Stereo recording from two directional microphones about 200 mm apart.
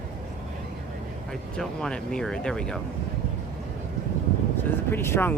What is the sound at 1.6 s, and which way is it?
Speech, 5° left (ahead or behind).